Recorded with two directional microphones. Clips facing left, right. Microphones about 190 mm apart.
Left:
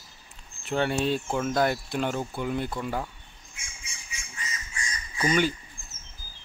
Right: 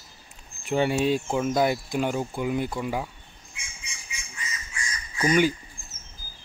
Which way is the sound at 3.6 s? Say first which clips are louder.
Right 3 dB; 45° left (ahead or behind).